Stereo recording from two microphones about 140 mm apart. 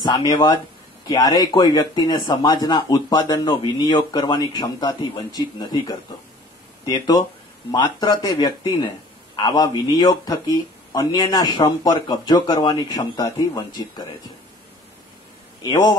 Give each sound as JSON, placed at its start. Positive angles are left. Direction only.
{"t": 0.1, "sound": "speech", "side_deg": 25}
{"t": 15.6, "sound": "a man's voice", "side_deg": 30}